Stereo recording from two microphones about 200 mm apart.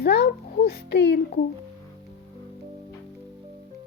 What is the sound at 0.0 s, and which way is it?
A child's voice, 55° left (ahead or behind).